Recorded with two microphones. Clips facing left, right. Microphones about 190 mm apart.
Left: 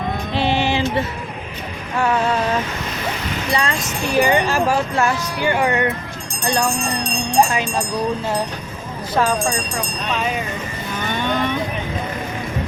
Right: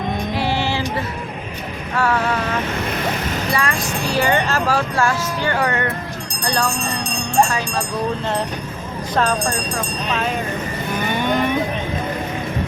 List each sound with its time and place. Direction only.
0.3 s a sound: 20° left (ahead or behind)
2.0 s vehicle: 20° left (ahead or behind)
3.5 s speech: 25° left (ahead or behind)
9.1 s speech: 5° left (ahead or behind)
11.1 s vehicle: 10° right (ahead or behind)